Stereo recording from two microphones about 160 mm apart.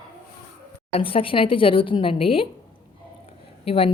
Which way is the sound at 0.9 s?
35° left (ahead or behind).